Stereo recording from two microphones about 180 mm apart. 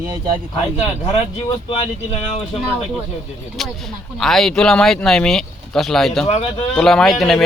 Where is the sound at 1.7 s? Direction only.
30° left (ahead or behind).